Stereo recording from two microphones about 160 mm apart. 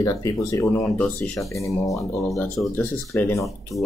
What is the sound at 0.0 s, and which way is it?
Speech, 20° left (ahead or behind).